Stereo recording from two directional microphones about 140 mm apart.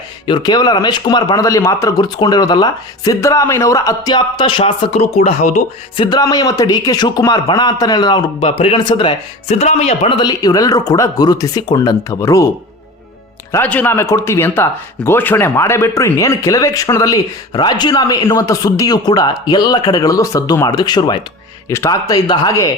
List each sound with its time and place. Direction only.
0.3 s speech: 30° left (ahead or behind); by 5.6 s 55° left (ahead or behind)
6.0 s a man's voice: 30° left (ahead or behind); by 10.2 s 50° left (ahead or behind)
10.2 s speech: 30° left (ahead or behind)
13.5 s speech: 15° left (ahead or behind)